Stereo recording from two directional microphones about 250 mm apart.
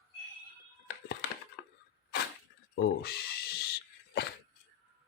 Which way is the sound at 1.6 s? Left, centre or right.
Left.